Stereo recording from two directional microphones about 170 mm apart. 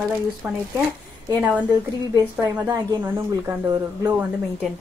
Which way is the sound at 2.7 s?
20° right (ahead or behind).